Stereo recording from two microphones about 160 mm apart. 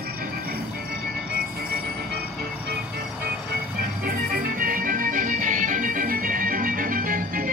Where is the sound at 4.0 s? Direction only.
65° right (ahead or behind).